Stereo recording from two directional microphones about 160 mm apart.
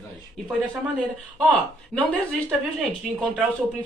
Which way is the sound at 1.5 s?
10° left (ahead or behind).